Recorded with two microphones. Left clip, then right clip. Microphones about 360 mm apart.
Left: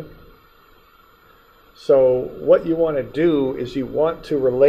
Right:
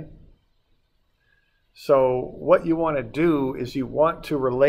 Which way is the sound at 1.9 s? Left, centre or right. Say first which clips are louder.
Left 4 dB; right.